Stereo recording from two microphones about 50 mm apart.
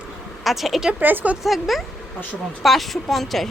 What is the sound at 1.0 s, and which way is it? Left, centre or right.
Speech, right.